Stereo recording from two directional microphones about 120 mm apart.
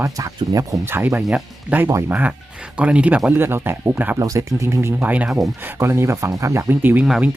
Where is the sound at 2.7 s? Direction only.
10° right (ahead or behind).